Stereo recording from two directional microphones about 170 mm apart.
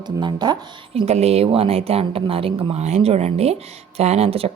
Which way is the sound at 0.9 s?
40° right (ahead or behind).